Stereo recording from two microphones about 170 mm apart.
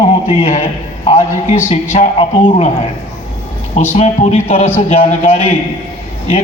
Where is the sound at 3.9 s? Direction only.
40° left (ahead or behind).